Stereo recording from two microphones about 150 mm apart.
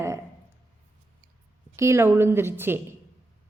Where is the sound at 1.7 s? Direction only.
20° right (ahead or behind).